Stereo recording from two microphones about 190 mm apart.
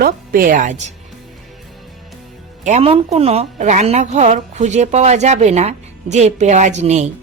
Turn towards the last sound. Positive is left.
turn(degrees=-35)  # may be behind; listen again after turning